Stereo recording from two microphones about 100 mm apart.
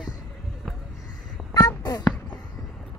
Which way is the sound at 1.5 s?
45° left (ahead or behind).